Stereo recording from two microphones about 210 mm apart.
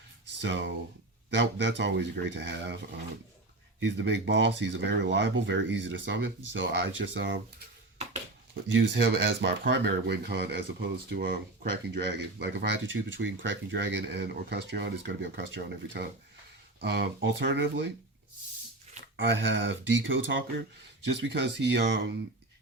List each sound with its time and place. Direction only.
0.4 s speech: 60° right (ahead or behind)
3.8 s speech: 60° right (ahead or behind)
8.6 s speech: 60° right (ahead or behind)
19.1 s speech: 65° right (ahead or behind)